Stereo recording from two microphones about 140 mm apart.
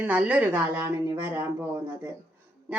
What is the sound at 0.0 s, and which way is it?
Speech, 10° right (ahead or behind).